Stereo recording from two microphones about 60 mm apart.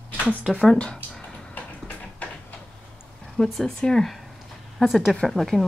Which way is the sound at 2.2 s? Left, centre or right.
Left.